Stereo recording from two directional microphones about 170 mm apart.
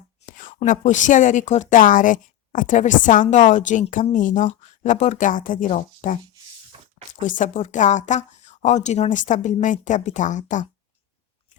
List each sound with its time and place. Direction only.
0.3 s a woman's voice: 50° left (ahead or behind)
6.7 s a sound: 30° right (ahead or behind)
7.2 s a woman's voice: 50° left (ahead or behind)